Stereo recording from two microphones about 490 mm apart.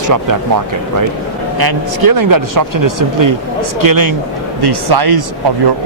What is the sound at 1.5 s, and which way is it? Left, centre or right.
Speech, right.